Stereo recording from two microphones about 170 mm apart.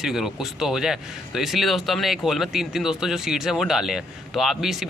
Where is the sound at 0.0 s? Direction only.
Centre (ahead or behind).